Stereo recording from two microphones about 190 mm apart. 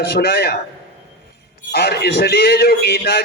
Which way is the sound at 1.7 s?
55° left (ahead or behind).